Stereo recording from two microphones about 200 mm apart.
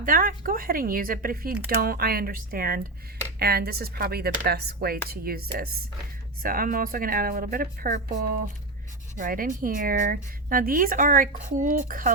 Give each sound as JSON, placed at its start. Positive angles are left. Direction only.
{"t": 0.0, "sound": "a woman's voice", "side_deg": -45}